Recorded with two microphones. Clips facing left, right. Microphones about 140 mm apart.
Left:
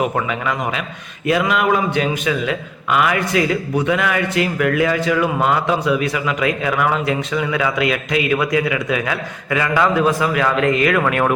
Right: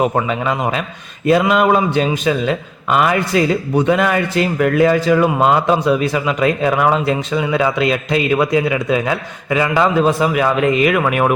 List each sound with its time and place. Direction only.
0.0 s a man's voice: 30° right (ahead or behind)